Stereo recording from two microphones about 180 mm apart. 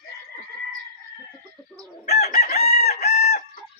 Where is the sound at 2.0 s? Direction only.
40° left (ahead or behind).